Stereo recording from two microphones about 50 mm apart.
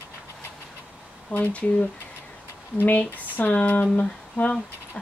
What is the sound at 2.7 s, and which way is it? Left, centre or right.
Speech, left.